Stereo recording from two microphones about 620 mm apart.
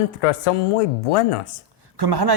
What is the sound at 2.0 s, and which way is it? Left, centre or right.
Speech, right.